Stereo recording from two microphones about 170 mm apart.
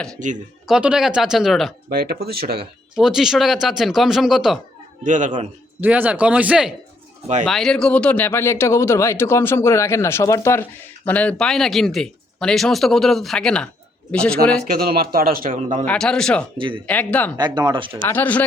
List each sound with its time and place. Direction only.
0.2 s speech: 45° right (ahead or behind)
0.7 s speech: 5° right (ahead or behind)
1.9 s a man's voice: 65° right (ahead or behind)
2.9 s speech: 5° right (ahead or behind)
5.0 s speech: 45° right (ahead or behind)
5.8 s speech: 10° right (ahead or behind); by 14.5 s 5° left (ahead or behind)
14.7 s a man's voice: 60° right (ahead or behind)
15.9 s speech: 5° left (ahead or behind)
16.6 s speech: 30° right (ahead or behind)
16.8 s speech: 10° left (ahead or behind)
17.3 s speech: 25° right (ahead or behind)
18.1 s speech: 10° left (ahead or behind)